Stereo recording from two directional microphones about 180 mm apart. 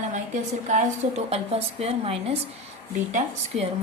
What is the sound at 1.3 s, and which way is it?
Speech, 35° right (ahead or behind).